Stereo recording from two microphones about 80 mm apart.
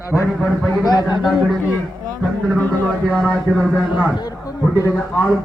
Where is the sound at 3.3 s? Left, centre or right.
Centre.